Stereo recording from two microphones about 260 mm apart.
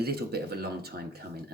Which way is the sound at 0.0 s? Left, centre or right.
Right.